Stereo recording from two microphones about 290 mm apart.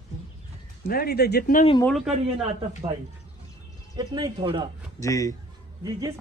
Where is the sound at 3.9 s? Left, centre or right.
Centre.